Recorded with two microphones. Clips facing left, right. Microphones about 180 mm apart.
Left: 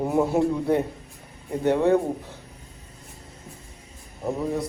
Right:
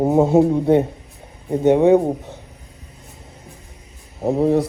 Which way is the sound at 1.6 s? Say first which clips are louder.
Right 7 dB; 20° right (ahead or behind).